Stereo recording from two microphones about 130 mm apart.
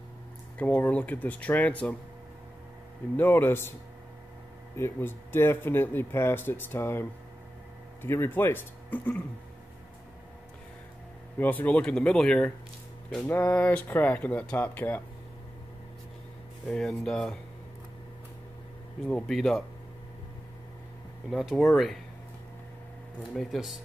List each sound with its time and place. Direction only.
0.6 s speech: 10° left (ahead or behind)
3.2 s speech: 15° left (ahead or behind)
4.7 s speech: 15° left (ahead or behind)
11.3 s speech: 15° left (ahead or behind)
16.6 s speech: 5° left (ahead or behind)
19.0 s speech: 5° left (ahead or behind)
21.3 s speech: centre (ahead or behind)
23.3 s speech: centre (ahead or behind)